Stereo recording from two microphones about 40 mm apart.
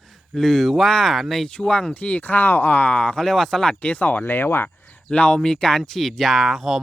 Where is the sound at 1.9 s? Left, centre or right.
Left.